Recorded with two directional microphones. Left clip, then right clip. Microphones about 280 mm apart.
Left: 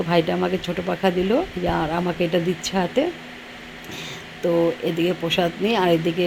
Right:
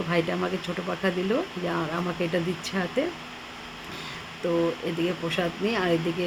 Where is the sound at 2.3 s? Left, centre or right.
Centre.